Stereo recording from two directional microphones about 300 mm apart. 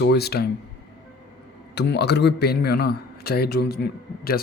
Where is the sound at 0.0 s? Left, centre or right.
Left.